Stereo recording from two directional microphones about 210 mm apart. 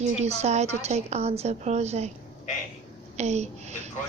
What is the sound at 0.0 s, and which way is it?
A woman's voice, 30° right (ahead or behind).